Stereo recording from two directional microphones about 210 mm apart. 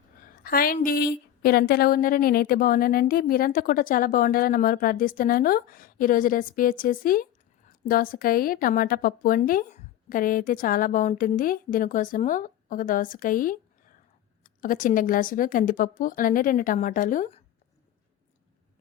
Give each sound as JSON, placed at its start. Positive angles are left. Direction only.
{"t": 0.4, "sound": "a woman's voice", "side_deg": 45}